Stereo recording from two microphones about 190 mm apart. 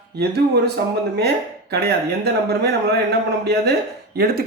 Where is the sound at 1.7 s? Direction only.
55° right (ahead or behind).